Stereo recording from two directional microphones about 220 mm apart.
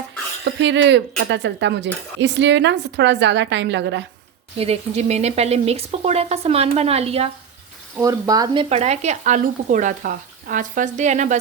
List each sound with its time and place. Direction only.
0.6 s speech: 55° right (ahead or behind)
4.5 s speech: 25° right (ahead or behind)
7.9 s speech: 15° right (ahead or behind)
8.7 s speech: 30° right (ahead or behind)